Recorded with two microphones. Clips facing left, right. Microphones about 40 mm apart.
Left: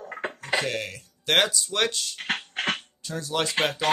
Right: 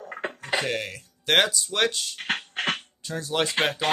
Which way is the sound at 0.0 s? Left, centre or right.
Centre.